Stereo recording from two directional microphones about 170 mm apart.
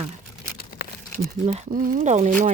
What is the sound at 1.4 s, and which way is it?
Speech, 40° right (ahead or behind).